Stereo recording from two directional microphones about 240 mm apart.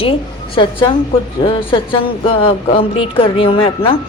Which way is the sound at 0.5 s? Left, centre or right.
Left.